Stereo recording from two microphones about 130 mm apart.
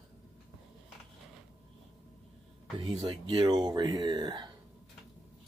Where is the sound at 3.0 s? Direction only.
35° right (ahead or behind).